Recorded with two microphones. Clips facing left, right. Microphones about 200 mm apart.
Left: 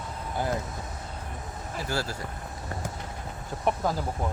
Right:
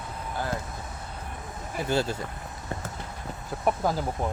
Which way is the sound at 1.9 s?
20° right (ahead or behind).